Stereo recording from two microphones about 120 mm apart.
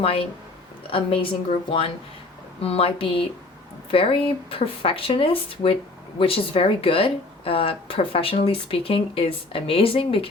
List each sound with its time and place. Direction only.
0.0 s speech: 50° left (ahead or behind)